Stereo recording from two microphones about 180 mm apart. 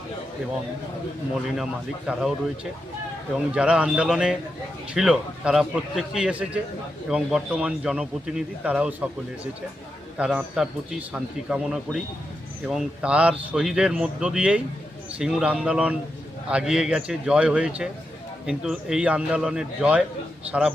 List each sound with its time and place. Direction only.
2.1 s speech: 5° right (ahead or behind)
3.3 s a man's voice: 5° right (ahead or behind)
10.2 s a man's voice: 5° right (ahead or behind)